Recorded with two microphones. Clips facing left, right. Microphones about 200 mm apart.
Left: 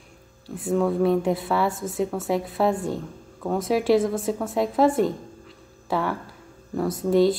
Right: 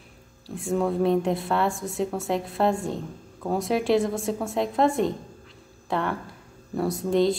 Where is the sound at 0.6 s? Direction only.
Centre (ahead or behind).